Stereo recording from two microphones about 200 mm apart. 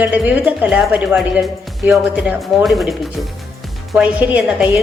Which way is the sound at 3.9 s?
5° right (ahead or behind).